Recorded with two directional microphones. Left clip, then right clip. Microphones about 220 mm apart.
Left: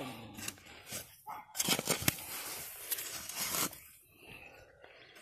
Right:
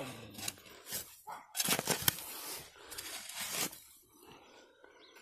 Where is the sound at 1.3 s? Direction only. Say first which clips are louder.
Left 1 dB; 10° right (ahead or behind).